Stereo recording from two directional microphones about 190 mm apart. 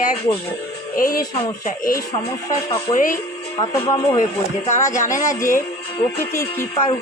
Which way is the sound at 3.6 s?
15° left (ahead or behind).